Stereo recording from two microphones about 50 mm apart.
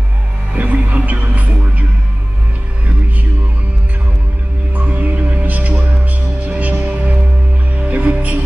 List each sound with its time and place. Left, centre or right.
0.6 s music: right
4.8 s music: right